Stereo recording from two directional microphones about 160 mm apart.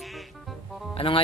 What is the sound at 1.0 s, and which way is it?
Speech, 35° left (ahead or behind).